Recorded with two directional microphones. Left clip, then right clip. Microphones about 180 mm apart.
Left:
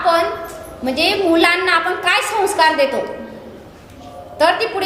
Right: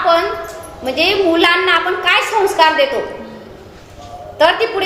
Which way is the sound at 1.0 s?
40° left (ahead or behind).